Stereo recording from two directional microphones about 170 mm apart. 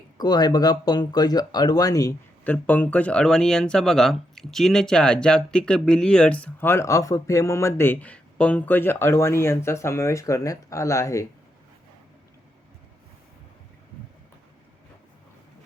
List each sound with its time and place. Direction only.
0.2 s speech: 25° left (ahead or behind)
2.4 s speech: 10° left (ahead or behind)